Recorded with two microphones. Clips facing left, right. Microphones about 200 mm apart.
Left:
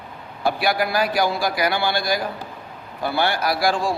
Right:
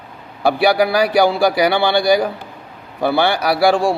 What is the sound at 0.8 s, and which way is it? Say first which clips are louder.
A man's voice: right 7 dB; 70° right (ahead or behind).